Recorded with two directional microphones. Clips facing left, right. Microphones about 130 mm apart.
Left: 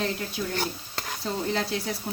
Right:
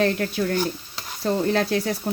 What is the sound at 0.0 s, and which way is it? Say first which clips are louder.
Speech: right 8 dB; 65° right (ahead or behind).